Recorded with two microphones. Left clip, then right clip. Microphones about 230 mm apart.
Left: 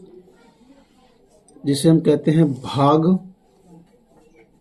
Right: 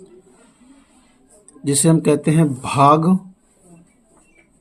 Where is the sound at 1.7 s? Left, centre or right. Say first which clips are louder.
Even; right.